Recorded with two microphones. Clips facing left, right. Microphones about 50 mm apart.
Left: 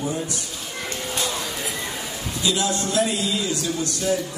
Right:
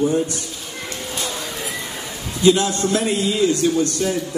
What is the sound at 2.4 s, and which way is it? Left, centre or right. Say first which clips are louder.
A man's voice: right 8 dB; right.